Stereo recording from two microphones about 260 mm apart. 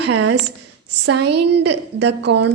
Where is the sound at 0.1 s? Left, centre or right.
Right.